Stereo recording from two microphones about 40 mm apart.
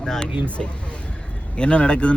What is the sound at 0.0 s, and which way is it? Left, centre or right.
Speech, centre.